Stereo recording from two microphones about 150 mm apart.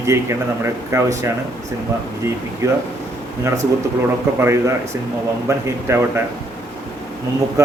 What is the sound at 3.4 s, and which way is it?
Speech, 20° right (ahead or behind).